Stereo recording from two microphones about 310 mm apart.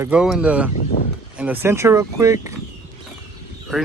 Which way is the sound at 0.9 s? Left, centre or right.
Left.